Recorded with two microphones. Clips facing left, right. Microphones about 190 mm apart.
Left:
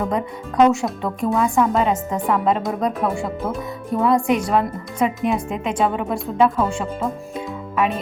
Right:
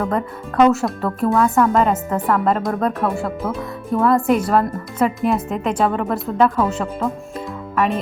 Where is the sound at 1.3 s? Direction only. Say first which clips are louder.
Right 2 dB; 10° left (ahead or behind).